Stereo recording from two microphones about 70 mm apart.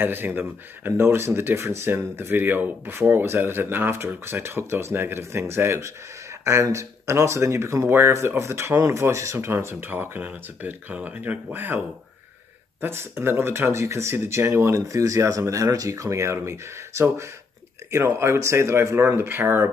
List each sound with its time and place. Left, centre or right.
0.0 s speech: right
9.5 s speech: right
12.8 s speech: right